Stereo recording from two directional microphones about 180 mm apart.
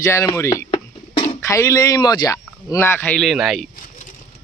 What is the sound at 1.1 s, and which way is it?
Bird, 30° left (ahead or behind).